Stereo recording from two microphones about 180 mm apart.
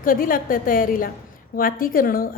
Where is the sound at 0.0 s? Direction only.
50° left (ahead or behind).